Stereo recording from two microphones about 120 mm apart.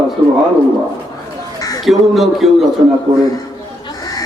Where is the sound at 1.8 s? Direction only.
Centre (ahead or behind).